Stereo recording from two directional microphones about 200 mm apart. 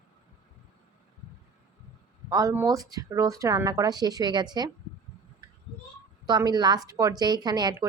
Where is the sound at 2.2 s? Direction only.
15° right (ahead or behind).